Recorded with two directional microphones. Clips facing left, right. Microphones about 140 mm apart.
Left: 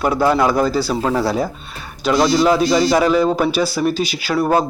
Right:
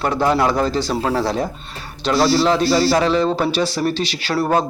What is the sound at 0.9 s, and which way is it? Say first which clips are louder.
Speech: left 1 dB; 5° right (ahead or behind).